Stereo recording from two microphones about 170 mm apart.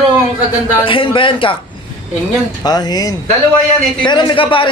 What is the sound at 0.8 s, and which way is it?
Speech, 30° left (ahead or behind).